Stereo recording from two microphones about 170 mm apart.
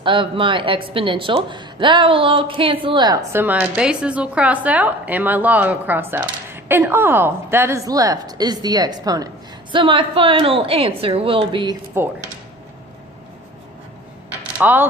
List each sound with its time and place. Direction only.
0.0 s a woman's voice: 30° right (ahead or behind)
14.6 s speech: 10° right (ahead or behind)